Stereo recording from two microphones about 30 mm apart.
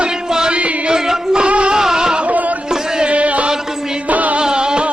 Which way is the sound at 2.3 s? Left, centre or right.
Right.